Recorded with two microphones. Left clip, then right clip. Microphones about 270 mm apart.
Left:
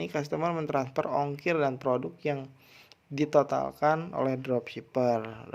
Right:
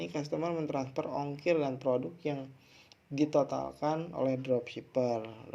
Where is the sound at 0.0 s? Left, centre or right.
Left.